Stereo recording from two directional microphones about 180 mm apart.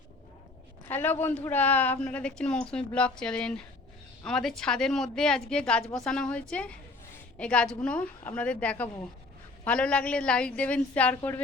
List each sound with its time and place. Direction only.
0.9 s a woman's voice: 10° left (ahead or behind)